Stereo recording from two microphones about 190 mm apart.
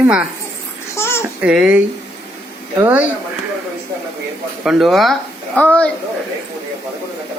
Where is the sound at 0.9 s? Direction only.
15° left (ahead or behind).